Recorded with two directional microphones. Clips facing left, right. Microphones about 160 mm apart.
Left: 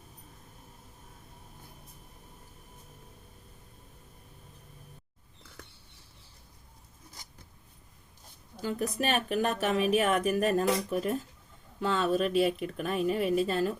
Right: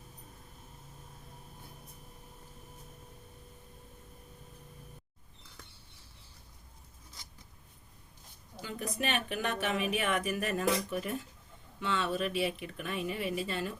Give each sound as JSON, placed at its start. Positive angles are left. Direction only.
{"t": 8.6, "sound": "speech", "side_deg": 40}